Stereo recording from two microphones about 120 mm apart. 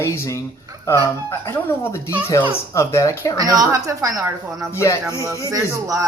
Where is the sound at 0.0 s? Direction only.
25° left (ahead or behind).